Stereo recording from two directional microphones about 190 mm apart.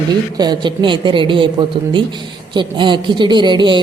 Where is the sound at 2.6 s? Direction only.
25° right (ahead or behind).